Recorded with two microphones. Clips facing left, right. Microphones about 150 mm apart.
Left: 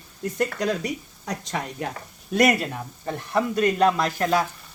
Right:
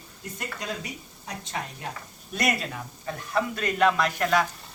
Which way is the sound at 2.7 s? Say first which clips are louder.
Left 4 dB; 40° left (ahead or behind).